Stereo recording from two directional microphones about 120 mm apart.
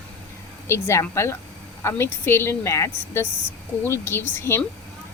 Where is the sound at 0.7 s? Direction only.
25° left (ahead or behind).